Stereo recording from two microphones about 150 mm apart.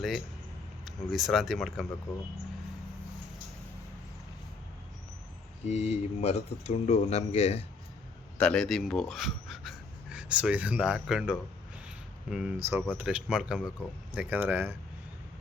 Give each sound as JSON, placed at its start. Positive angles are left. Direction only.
{"t": 1.1, "sound": "speech", "side_deg": 0}
{"t": 5.6, "sound": "speech", "side_deg": 45}
{"t": 8.4, "sound": "speech", "side_deg": 5}